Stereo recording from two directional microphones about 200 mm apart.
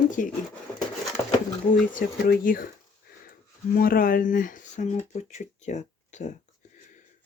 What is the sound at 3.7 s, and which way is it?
Speech, 45° left (ahead or behind).